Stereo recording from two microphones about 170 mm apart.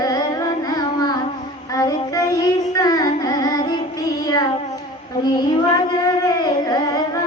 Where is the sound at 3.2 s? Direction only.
25° left (ahead or behind).